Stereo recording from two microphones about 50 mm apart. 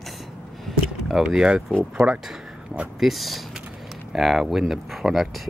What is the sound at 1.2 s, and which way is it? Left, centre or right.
Speech, centre.